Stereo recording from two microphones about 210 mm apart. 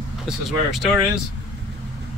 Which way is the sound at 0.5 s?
Centre (ahead or behind).